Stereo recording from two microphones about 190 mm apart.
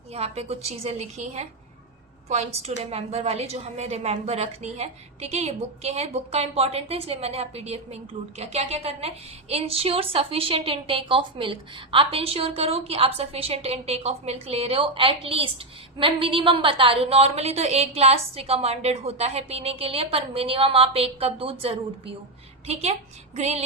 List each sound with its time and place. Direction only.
0.1 s a woman's voice: 35° right (ahead or behind)